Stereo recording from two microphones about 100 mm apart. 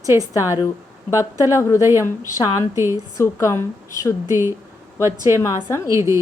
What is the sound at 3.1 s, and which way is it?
Speech, 30° left (ahead or behind).